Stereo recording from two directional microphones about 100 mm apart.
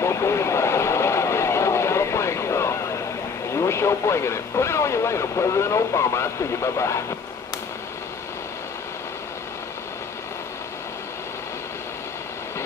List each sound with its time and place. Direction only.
0.0 s vehicle: 30° left (ahead or behind)
3.5 s speech: 30° left (ahead or behind)